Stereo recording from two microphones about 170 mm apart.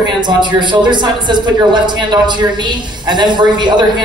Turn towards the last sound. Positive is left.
turn(degrees=-25)  # may be behind; listen again after turning